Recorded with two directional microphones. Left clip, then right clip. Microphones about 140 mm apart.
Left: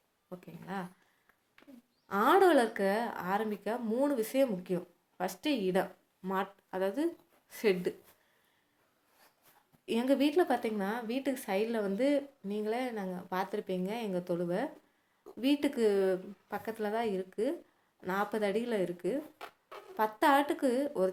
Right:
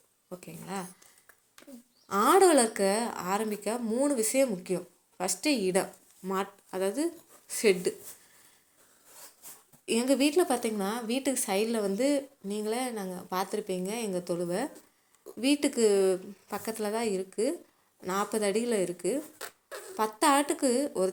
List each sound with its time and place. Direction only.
0.3 s speech: 15° right (ahead or behind)
2.0 s speech: 20° right (ahead or behind)
9.8 s speech: 15° right (ahead or behind)